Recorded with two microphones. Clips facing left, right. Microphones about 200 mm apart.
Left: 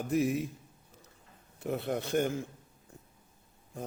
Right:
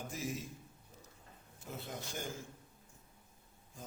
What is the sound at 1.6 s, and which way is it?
Speech, 65° left (ahead or behind).